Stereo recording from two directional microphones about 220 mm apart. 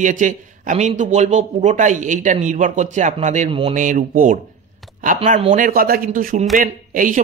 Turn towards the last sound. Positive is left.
turn(degrees=-40)  # may be behind; listen again after turning